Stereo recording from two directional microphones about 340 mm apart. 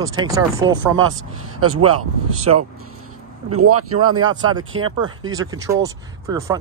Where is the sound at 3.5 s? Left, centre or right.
Right.